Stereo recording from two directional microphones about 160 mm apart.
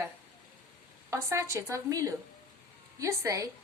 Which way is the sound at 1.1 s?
20° right (ahead or behind).